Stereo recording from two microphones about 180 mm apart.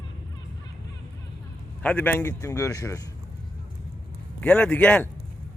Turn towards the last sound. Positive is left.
turn(degrees=5)  # may be behind; listen again after turning